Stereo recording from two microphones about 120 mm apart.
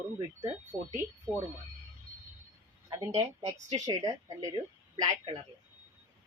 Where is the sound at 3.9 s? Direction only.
30° right (ahead or behind).